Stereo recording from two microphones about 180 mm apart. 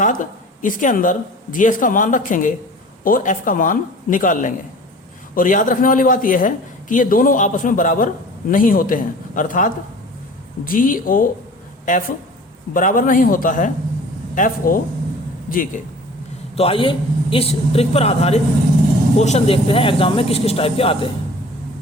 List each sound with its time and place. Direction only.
0.0 s a man's voice: 45° left (ahead or behind)
16.6 s speech: 30° left (ahead or behind)